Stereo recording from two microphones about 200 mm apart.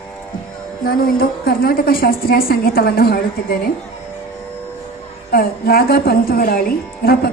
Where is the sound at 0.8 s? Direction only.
45° left (ahead or behind).